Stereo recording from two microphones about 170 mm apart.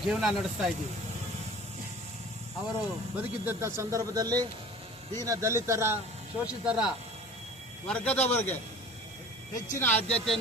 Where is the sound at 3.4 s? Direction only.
15° right (ahead or behind).